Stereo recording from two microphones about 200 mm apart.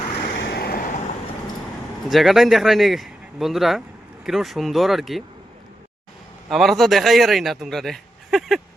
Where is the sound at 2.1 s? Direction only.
Centre (ahead or behind).